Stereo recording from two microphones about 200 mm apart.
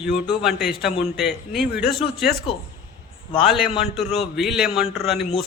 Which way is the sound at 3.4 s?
Centre (ahead or behind).